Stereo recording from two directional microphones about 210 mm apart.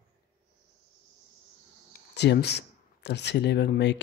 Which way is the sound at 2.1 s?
55° left (ahead or behind).